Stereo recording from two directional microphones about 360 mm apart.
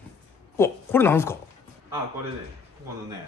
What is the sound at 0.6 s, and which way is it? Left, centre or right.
Speech, centre.